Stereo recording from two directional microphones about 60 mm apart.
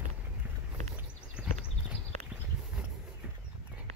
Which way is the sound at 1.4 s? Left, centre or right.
Centre.